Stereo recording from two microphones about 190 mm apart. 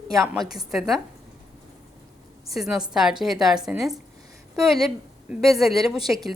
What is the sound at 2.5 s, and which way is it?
A woman's voice, centre (ahead or behind).